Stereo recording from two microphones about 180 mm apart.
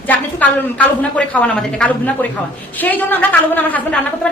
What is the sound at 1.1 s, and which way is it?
A woman's voice, 5° left (ahead or behind).